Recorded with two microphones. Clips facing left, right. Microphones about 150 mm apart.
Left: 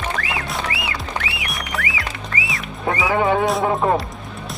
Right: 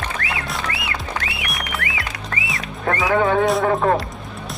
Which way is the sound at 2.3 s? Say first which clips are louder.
Left 1 dB; 65° right (ahead or behind).